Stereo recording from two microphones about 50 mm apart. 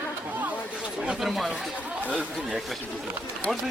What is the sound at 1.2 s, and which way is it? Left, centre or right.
Speech, centre.